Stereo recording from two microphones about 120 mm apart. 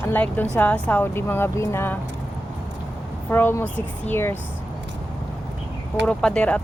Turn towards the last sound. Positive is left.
turn(degrees=10)  # may be behind; listen again after turning